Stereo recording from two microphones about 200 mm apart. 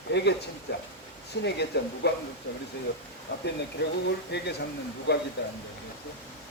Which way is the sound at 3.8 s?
55° left (ahead or behind).